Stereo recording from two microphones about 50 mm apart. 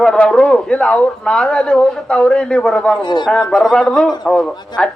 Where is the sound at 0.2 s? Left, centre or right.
Left.